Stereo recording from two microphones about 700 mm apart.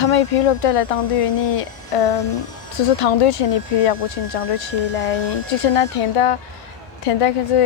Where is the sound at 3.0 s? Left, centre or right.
Left.